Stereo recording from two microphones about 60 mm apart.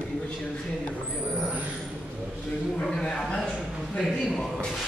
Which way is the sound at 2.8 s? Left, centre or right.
Centre.